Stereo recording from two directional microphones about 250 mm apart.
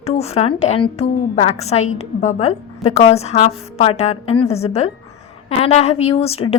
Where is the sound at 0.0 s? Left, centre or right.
Left.